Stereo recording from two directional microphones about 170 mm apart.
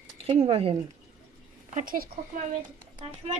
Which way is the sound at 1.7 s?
50° right (ahead or behind).